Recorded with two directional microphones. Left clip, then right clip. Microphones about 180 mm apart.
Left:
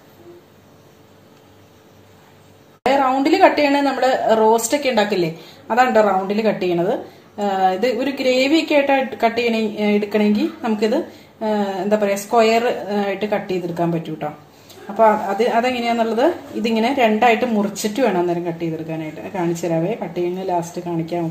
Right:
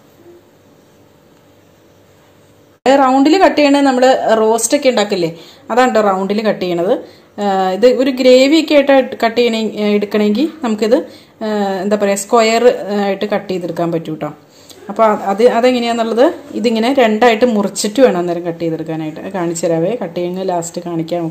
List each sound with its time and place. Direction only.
2.8 s a woman's voice: 45° right (ahead or behind)